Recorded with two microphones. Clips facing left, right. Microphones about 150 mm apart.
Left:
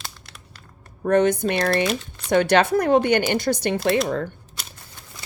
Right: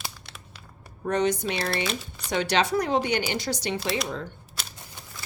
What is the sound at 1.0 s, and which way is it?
Speech, 55° left (ahead or behind).